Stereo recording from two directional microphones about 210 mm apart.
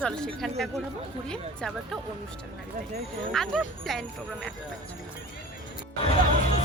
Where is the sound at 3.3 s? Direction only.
Centre (ahead or behind).